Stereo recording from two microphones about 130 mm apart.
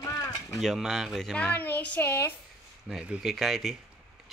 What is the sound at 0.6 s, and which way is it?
Speech, centre (ahead or behind).